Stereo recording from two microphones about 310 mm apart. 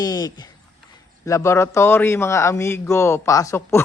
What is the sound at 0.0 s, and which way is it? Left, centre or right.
A man's voice, centre.